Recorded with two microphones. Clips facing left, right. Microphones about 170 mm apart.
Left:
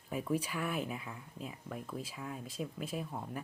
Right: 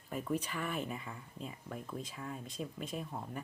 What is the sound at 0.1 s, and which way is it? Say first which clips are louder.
Speech: left 2 dB; 5° left (ahead or behind).